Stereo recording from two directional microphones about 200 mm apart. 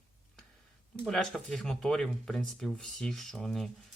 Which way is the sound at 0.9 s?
Centre (ahead or behind).